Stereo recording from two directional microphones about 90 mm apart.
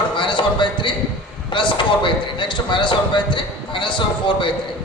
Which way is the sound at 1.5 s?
65° left (ahead or behind).